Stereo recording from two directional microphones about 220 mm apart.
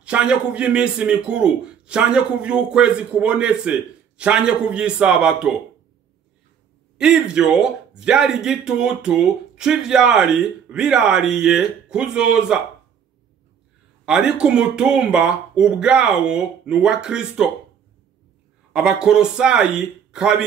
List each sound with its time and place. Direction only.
0.0 s speech: 5° right (ahead or behind)
7.0 s speech: 5° right (ahead or behind)
14.0 s speech: 5° right (ahead or behind)
18.7 s speech: 5° right (ahead or behind)